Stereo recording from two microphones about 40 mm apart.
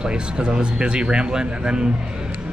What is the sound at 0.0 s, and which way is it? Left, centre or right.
Speech, right.